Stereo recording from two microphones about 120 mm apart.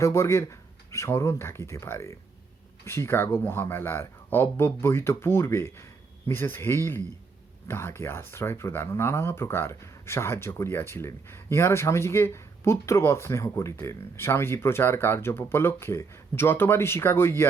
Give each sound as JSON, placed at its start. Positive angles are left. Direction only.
{"t": 0.0, "sound": "speech", "side_deg": 25}